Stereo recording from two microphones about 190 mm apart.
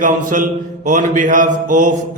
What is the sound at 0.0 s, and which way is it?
Mantra, 45° right (ahead or behind).